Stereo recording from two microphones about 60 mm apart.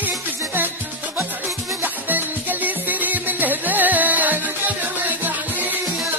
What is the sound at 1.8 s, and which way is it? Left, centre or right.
Music, right.